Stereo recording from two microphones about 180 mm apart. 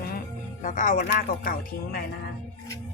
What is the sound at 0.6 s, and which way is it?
A woman's voice, 45° left (ahead or behind).